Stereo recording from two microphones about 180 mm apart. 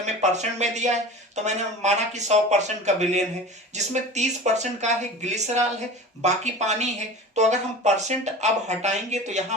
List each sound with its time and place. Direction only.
0.0 s speech: 40° right (ahead or behind)